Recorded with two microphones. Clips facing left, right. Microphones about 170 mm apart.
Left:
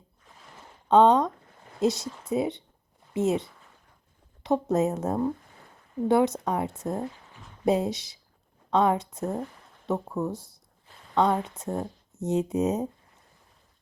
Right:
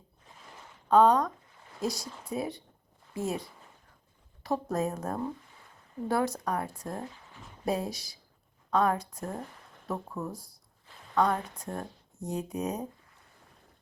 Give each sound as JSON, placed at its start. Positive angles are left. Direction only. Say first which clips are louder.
{"t": 0.9, "sound": "a woman's voice", "louder": "left 3 dB", "side_deg": 25}